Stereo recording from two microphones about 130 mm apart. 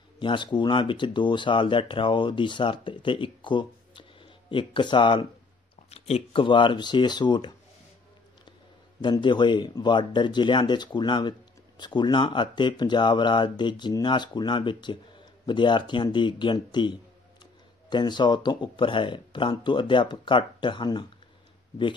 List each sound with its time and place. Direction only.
0.2 s speech: 35° left (ahead or behind)
5.9 s speech: 55° left (ahead or behind); by 7.5 s 35° left (ahead or behind)
9.0 s speech: 35° left (ahead or behind)